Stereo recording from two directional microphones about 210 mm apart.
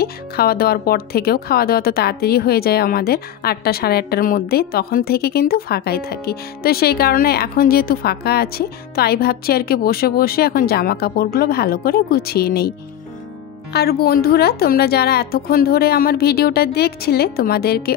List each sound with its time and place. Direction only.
0.0 s speech: 45° left (ahead or behind)
13.7 s speech: 45° left (ahead or behind)